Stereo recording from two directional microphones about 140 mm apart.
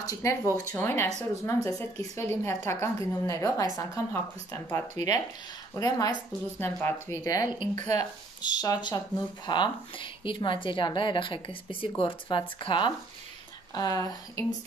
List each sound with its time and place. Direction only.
0.0 s a woman's voice: 25° left (ahead or behind)
6.6 s a woman's voice: 15° left (ahead or behind)
7.7 s speech: 55° right (ahead or behind)
8.4 s a woman's voice: 30° left (ahead or behind)